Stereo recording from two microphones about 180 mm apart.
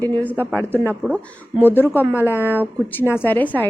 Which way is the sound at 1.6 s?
10° left (ahead or behind).